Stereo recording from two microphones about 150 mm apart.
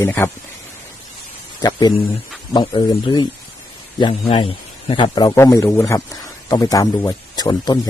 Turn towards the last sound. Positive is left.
turn(degrees=25)  # may be behind; listen again after turning